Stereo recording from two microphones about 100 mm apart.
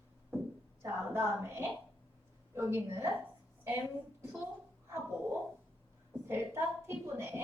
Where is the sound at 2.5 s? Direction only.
25° right (ahead or behind).